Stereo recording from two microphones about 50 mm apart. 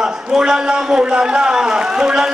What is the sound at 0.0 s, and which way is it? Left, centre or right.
A man's voice, centre.